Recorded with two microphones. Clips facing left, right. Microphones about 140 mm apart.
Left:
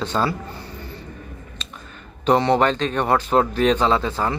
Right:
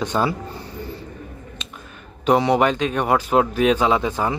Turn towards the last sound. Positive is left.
turn(degrees=-15)  # may be behind; listen again after turning